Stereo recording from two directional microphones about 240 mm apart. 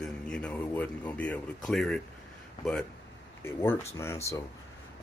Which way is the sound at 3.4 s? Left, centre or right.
Centre.